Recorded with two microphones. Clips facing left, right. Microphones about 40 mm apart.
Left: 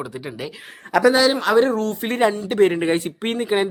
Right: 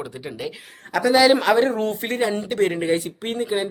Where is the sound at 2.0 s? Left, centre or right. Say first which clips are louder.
Left 3 dB; left.